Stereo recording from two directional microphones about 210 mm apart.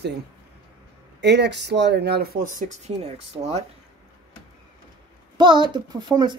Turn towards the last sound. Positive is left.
turn(degrees=-20)  # may be behind; listen again after turning